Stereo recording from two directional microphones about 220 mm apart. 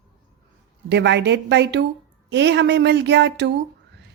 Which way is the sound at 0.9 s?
50° right (ahead or behind).